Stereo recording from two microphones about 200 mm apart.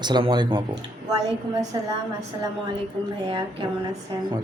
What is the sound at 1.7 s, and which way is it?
Speech, 20° right (ahead or behind).